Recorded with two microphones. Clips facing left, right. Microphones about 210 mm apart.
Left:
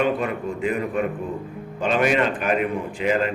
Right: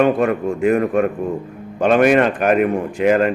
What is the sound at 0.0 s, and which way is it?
A man's voice, 50° right (ahead or behind).